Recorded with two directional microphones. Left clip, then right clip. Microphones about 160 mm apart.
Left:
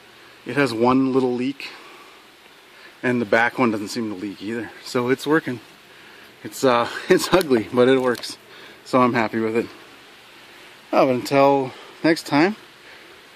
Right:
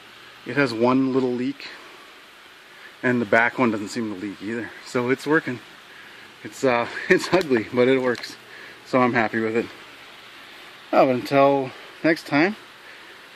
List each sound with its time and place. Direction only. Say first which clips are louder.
0.5 s speech: left 2 dB; 15° left (ahead or behind)
3.0 s speech: even; 5° left (ahead or behind)
6.6 s speech: left 3 dB; 15° left (ahead or behind)
10.9 s speech: even; 10° left (ahead or behind)